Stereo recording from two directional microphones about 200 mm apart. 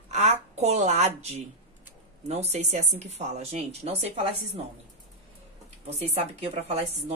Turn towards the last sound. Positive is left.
turn(degrees=-35)  # may be behind; listen again after turning